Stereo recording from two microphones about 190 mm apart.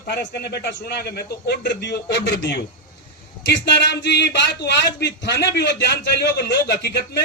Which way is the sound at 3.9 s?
65° left (ahead or behind).